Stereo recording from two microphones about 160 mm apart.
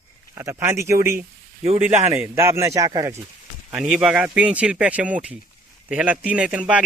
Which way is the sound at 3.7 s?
5° right (ahead or behind).